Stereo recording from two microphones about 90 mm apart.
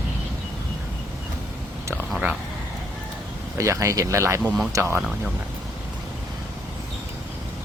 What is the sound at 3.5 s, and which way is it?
Speech, 35° right (ahead or behind).